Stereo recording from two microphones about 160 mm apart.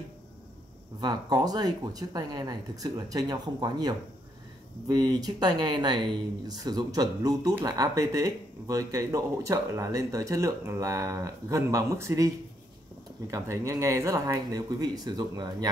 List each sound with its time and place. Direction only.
1.0 s speech: 25° right (ahead or behind)
13.3 s speech: 20° right (ahead or behind)